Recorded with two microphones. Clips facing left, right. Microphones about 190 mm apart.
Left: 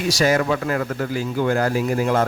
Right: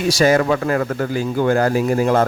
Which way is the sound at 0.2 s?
50° right (ahead or behind).